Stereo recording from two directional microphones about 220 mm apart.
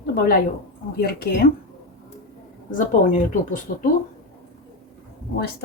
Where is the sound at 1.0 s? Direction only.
45° left (ahead or behind).